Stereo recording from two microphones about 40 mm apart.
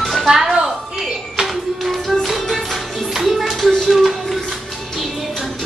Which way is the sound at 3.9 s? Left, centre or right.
Centre.